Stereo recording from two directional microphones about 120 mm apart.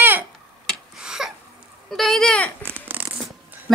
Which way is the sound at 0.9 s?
5° right (ahead or behind).